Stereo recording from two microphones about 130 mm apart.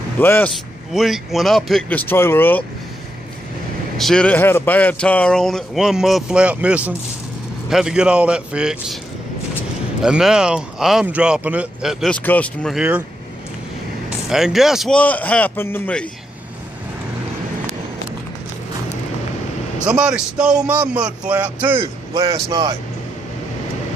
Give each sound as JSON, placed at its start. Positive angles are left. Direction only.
{"t": 0.2, "sound": "speech", "side_deg": 15}
{"t": 0.9, "sound": "speech", "side_deg": 0}
{"t": 4.0, "sound": "speech", "side_deg": 5}
{"t": 4.4, "sound": "a man's voice", "side_deg": 20}
{"t": 10.0, "sound": "speech", "side_deg": -5}
{"t": 12.1, "sound": "speech", "side_deg": 10}
{"t": 12.7, "sound": "a man's voice", "side_deg": -10}
{"t": 14.3, "sound": "speech", "side_deg": -5}
{"t": 15.0, "sound": "speech", "side_deg": 10}
{"t": 19.8, "sound": "a man's voice", "side_deg": -5}
{"t": 22.1, "sound": "a man's voice", "side_deg": -30}